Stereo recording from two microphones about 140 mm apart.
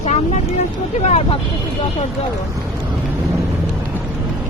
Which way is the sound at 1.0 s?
45° left (ahead or behind).